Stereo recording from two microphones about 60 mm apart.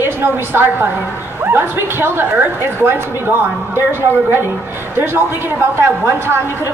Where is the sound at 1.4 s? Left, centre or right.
Right.